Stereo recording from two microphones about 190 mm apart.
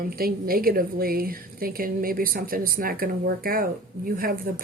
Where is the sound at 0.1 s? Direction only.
50° right (ahead or behind).